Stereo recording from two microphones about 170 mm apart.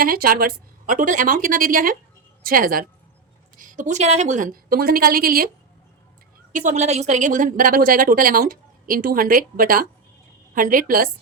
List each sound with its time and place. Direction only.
0.0 s a woman's voice: 60° right (ahead or behind)
6.5 s a woman's voice: 45° right (ahead or behind)